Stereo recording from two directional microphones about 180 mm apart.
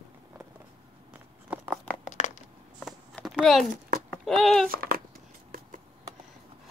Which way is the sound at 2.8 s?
Centre (ahead or behind).